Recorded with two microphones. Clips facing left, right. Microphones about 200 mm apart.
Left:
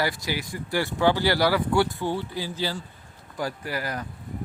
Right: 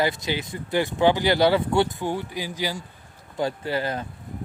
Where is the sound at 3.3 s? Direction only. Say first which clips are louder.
Right 4 dB; 25° right (ahead or behind).